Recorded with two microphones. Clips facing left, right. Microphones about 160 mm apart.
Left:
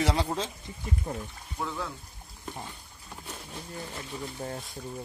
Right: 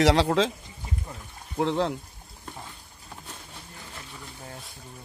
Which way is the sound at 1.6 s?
80° right.